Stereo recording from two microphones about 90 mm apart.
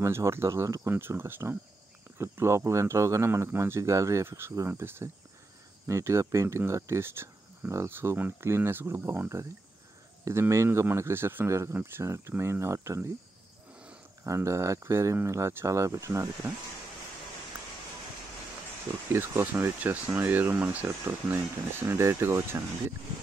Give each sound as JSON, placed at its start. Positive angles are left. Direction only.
{"t": 0.0, "sound": "speech", "side_deg": -30}
{"t": 14.2, "sound": "speech", "side_deg": -35}
{"t": 19.1, "sound": "speech", "side_deg": -20}